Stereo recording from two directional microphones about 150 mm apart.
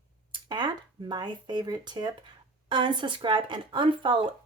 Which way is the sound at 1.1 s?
30° right (ahead or behind).